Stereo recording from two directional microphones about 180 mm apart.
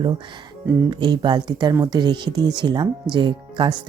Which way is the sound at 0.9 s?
25° right (ahead or behind).